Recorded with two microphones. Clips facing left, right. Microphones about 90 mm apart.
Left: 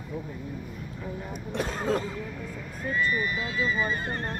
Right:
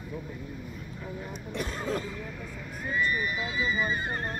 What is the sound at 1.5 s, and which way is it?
Speech, 90° left.